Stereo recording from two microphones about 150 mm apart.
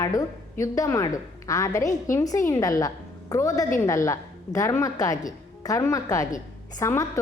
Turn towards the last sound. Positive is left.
turn(degrees=20)  # may be behind; listen again after turning